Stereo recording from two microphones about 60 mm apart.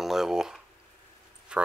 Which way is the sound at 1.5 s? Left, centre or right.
Centre.